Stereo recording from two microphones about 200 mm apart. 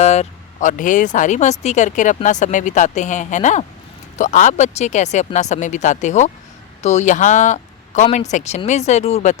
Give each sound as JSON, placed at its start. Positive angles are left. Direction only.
{"t": 0.0, "sound": "speech", "side_deg": 35}